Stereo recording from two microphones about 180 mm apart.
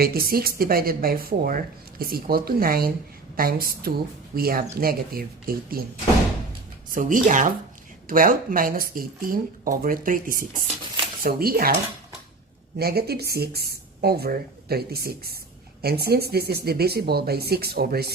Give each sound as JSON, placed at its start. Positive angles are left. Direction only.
{"t": 0.0, "sound": "speech", "side_deg": -55}
{"t": 6.9, "sound": "speech", "side_deg": -45}
{"t": 12.7, "sound": "speech", "side_deg": -60}